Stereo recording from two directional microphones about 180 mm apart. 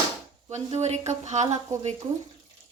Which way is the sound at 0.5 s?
40° right (ahead or behind).